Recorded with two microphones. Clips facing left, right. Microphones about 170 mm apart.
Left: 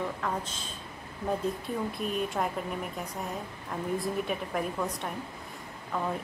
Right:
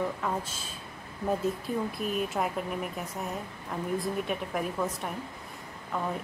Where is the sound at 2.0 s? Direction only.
Centre (ahead or behind).